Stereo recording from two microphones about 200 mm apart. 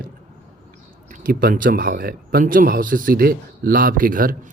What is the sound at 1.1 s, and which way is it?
A man's voice, 45° right (ahead or behind).